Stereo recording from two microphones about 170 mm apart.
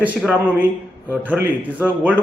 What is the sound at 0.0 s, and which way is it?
Speech, 5° right (ahead or behind).